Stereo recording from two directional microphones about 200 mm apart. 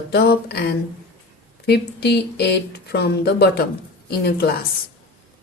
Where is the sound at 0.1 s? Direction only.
50° left (ahead or behind).